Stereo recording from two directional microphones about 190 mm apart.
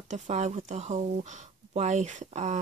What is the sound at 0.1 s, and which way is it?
Speech, 35° right (ahead or behind).